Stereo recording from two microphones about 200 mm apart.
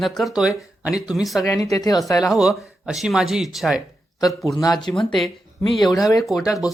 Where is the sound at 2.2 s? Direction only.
Centre (ahead or behind).